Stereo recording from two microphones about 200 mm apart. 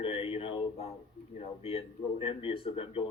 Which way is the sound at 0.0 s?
25° left (ahead or behind).